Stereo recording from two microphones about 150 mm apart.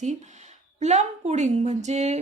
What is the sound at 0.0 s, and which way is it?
A woman's voice, 50° right (ahead or behind).